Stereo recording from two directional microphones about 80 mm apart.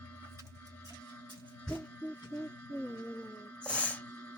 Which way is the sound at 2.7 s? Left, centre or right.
Left.